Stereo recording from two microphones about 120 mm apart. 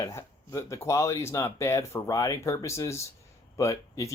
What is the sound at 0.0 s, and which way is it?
Speech, 25° left (ahead or behind).